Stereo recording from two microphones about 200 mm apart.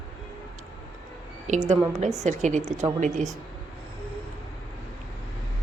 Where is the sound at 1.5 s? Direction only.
40° right (ahead or behind).